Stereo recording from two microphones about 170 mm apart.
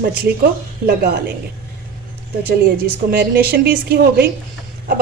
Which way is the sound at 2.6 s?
60° right (ahead or behind).